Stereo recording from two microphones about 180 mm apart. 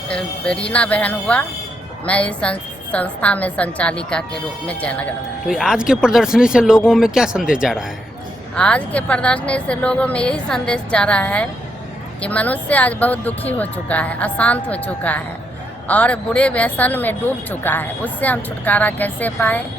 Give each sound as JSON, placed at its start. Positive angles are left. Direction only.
{"t": 0.1, "sound": "a woman's voice", "side_deg": 5}